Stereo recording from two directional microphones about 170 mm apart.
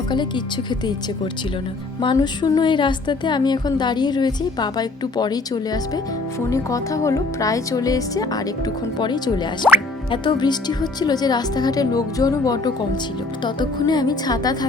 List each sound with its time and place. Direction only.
0.1 s a woman's voice: 25° left (ahead or behind)